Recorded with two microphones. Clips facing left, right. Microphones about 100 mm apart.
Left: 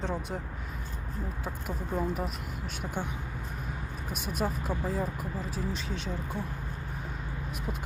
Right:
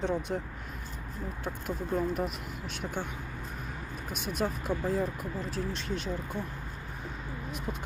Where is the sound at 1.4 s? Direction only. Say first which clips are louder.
Right 1 dB; 5° left (ahead or behind).